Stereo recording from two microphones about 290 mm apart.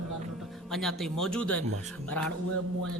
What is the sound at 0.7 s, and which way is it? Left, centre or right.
Speech, centre.